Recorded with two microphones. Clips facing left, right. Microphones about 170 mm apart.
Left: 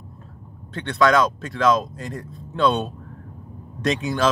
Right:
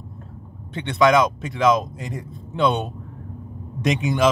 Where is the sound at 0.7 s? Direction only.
20° right (ahead or behind).